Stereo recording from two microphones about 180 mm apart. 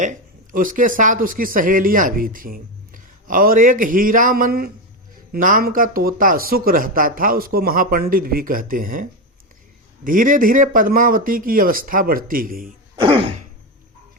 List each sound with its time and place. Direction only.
0.0 s speech: 45° right (ahead or behind)
13.0 s throat clearing: 30° right (ahead or behind)